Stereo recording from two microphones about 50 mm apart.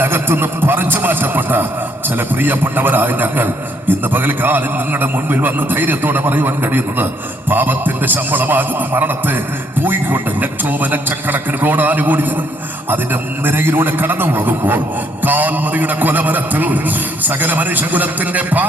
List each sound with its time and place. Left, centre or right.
0.0 s a man's voice: right
13.4 s a man's voice: right